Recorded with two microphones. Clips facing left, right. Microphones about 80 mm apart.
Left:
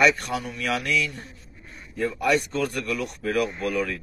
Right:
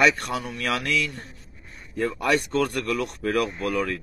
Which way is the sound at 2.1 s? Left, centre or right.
Right.